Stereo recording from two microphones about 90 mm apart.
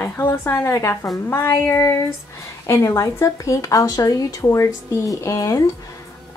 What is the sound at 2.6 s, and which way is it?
A woman's voice, 25° left (ahead or behind).